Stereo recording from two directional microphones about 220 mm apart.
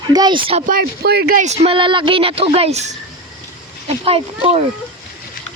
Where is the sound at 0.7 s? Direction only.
45° right (ahead or behind); by 4.6 s 25° right (ahead or behind).